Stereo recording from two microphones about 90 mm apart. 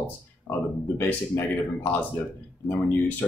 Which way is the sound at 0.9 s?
25° left (ahead or behind).